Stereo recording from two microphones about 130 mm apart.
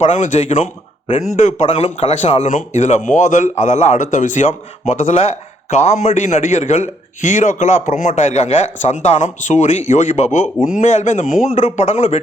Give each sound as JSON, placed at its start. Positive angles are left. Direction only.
{"t": 0.0, "sound": "a man's voice", "side_deg": 60}
{"t": 4.9, "sound": "a man's voice", "side_deg": 60}